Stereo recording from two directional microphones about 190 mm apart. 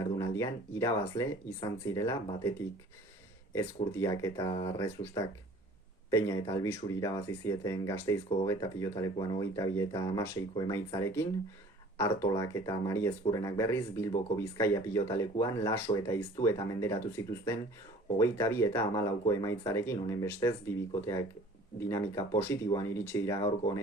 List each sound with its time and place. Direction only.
0.0 s speech: 15° left (ahead or behind)